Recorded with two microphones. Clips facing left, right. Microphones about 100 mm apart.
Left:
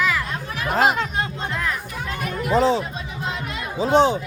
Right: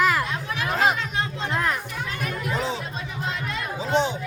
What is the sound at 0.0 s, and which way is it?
Chatter, 40° right (ahead or behind).